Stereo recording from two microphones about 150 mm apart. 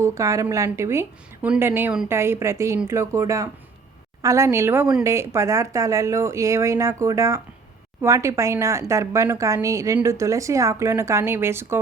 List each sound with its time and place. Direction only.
0.0 s a woman's voice: 20° right (ahead or behind)